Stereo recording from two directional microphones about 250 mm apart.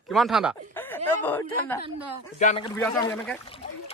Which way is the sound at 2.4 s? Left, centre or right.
Left.